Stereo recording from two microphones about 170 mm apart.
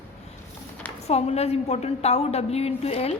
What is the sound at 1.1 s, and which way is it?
A woman's voice, 40° left (ahead or behind).